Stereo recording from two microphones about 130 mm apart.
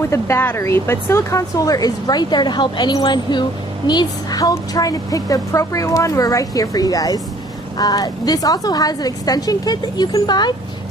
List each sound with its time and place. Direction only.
0.0 s speech: 20° left (ahead or behind)